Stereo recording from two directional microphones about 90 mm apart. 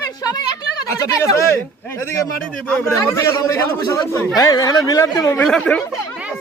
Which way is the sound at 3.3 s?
40° left (ahead or behind).